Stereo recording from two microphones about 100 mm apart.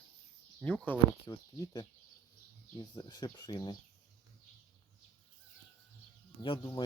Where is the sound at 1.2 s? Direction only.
40° left (ahead or behind).